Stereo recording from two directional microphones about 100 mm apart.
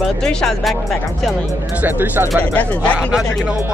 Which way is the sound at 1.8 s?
20° right (ahead or behind).